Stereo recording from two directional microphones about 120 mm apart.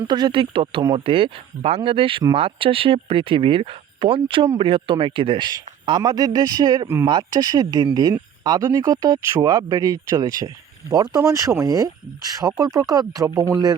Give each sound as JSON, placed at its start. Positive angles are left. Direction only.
{"t": 0.0, "sound": "speech", "side_deg": -40}
{"t": 6.8, "sound": "speech", "side_deg": -20}
{"t": 7.1, "sound": "speech", "side_deg": -35}